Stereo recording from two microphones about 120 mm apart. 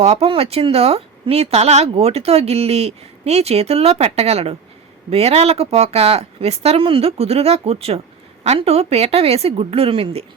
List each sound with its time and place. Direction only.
0.0 s speech: 60° right (ahead or behind)